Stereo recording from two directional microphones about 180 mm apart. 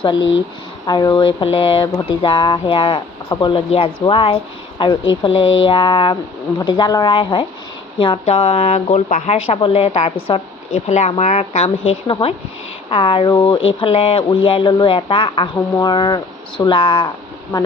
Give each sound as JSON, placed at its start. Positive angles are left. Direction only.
{"t": 0.9, "sound": "speech", "side_deg": 25}